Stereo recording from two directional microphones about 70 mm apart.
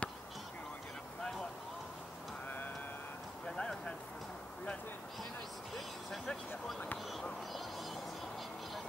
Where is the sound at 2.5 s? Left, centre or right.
Left.